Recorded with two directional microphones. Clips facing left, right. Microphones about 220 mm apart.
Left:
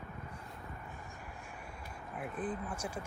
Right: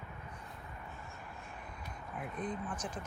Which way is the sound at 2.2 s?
5° left (ahead or behind).